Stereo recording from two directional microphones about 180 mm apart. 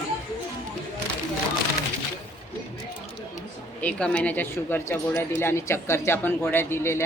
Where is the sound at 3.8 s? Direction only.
5° left (ahead or behind).